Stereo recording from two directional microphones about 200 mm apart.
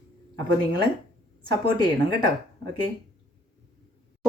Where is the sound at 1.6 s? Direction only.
25° left (ahead or behind).